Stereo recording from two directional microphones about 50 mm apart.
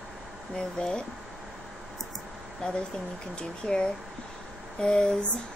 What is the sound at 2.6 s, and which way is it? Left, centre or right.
A woman's voice, centre.